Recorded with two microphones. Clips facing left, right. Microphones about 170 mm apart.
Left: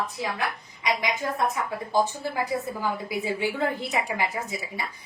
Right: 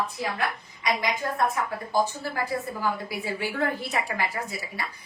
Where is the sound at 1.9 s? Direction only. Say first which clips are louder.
Left 1 dB; 20° left (ahead or behind).